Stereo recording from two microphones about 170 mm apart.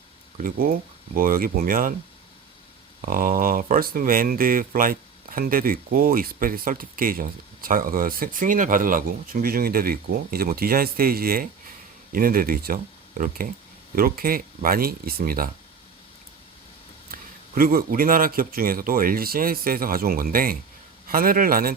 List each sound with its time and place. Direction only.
0.3 s speech: 55° right (ahead or behind)
3.0 s speech: 55° right (ahead or behind)
17.1 s speech: 55° right (ahead or behind)